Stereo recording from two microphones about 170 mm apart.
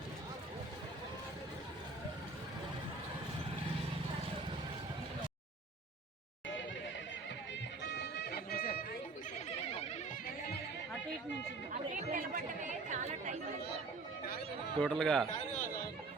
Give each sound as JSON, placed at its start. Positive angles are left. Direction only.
{"t": 7.9, "sound": "music", "side_deg": 75}
{"t": 12.1, "sound": "chatter", "side_deg": -55}
{"t": 14.8, "sound": "speech", "side_deg": 5}
{"t": 15.3, "sound": "chatter", "side_deg": 45}